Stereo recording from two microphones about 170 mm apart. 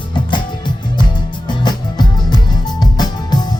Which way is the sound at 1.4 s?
25° left (ahead or behind).